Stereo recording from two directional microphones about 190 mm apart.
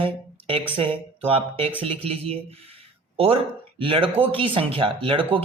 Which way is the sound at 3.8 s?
30° right (ahead or behind).